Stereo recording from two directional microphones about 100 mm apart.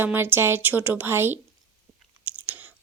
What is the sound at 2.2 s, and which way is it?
Chewing, 15° right (ahead or behind).